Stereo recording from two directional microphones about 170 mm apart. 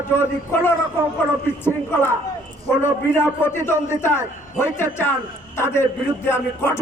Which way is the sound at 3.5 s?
15° left (ahead or behind).